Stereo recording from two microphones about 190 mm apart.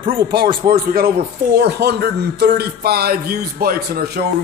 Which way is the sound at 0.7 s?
50° right (ahead or behind).